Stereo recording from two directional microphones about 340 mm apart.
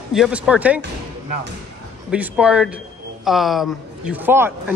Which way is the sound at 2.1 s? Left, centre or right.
Centre.